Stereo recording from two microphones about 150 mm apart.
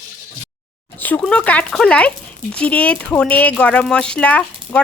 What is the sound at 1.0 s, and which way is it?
Speech, 10° left (ahead or behind).